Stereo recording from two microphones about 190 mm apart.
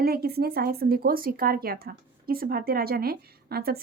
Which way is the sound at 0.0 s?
55° right (ahead or behind).